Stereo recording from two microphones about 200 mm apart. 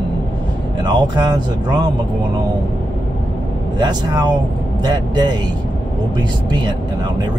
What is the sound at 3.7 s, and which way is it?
Speech, 20° right (ahead or behind).